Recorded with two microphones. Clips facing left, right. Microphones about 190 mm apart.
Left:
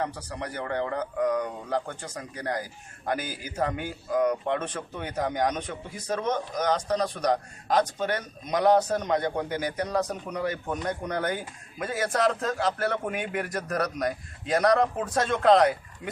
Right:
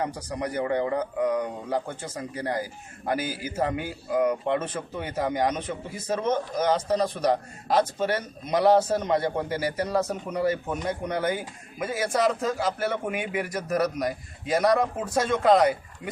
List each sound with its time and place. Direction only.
0.0 s a man's voice: 10° right (ahead or behind)